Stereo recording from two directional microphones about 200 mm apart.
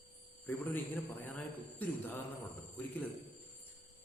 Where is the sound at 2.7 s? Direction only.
10° left (ahead or behind).